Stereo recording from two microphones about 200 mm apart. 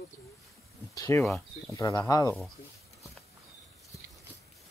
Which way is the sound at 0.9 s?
15° left (ahead or behind).